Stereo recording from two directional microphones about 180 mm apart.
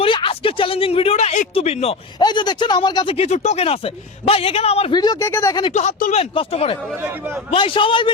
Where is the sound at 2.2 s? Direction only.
25° left (ahead or behind).